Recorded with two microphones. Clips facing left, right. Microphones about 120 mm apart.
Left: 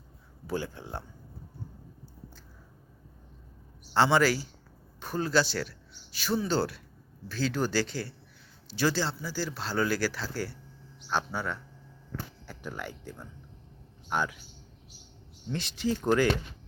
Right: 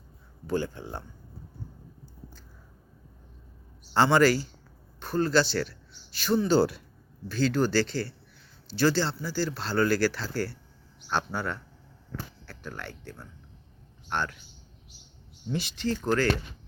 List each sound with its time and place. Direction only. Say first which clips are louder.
0.4 s speech: right 4 dB; 5° left (ahead or behind)
3.9 s speech: right 3 dB; centre (ahead or behind)
6.5 s speech: right 6 dB; 15° right (ahead or behind)
7.3 s speech: right 4 dB; 5° left (ahead or behind)
15.4 s speech: right 3 dB; 5° right (ahead or behind)
15.7 s speech: left 2 dB; 10° left (ahead or behind)